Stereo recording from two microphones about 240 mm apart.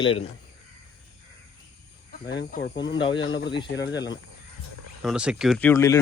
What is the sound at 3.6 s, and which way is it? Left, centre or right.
Speech, left.